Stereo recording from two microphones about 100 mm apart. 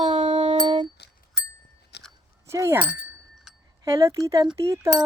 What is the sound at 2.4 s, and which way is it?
Speech, 30° right (ahead or behind).